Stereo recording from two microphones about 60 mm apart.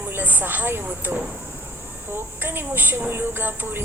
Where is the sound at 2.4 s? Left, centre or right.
Right.